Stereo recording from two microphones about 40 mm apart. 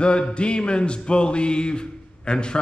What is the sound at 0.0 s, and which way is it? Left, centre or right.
A man's voice, left.